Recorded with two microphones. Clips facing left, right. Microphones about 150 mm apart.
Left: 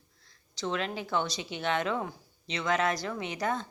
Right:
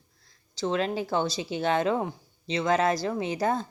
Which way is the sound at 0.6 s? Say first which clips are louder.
Right 6 dB; 35° right (ahead or behind).